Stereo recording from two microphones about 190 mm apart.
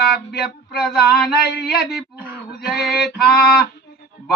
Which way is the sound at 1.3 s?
60° left (ahead or behind).